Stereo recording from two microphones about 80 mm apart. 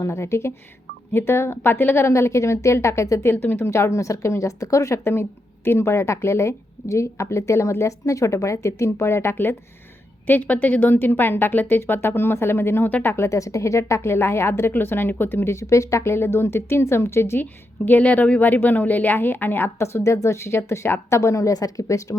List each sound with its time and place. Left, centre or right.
0.0 s a woman's voice: left